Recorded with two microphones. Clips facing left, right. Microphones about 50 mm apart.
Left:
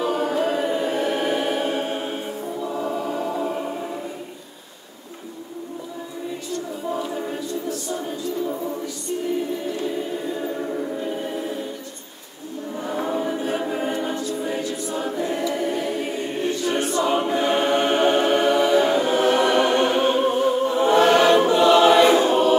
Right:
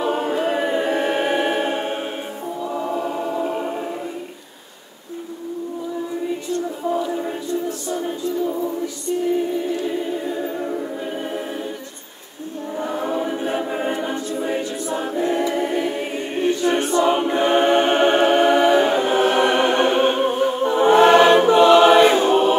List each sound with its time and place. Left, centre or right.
0.0 s choir: right
2.8 s choir: right
13.1 s choir: right
16.6 s a capella: right